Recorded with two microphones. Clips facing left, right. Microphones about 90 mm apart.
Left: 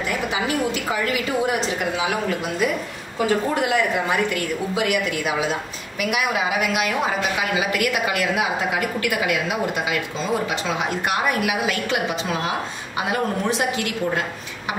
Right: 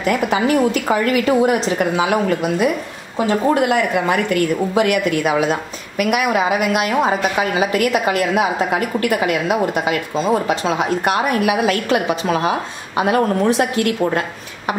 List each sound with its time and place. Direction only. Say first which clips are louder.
0.0 s a woman's voice: right 7 dB; 50° right (ahead or behind)
3.4 s a woman's voice: right 5 dB; 55° right (ahead or behind)
6.9 s a woman's voice: right 5 dB; 35° right (ahead or behind)